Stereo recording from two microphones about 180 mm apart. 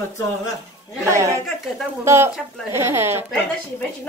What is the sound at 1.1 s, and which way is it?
A woman's voice, 15° right (ahead or behind).